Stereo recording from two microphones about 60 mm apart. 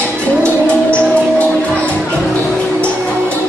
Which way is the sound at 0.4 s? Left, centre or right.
Left.